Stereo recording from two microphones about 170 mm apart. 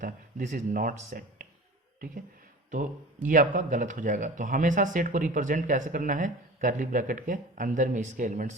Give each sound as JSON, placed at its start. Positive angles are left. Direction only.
{"t": 0.0, "sound": "speech", "side_deg": -55}
{"t": 3.2, "sound": "speech", "side_deg": -50}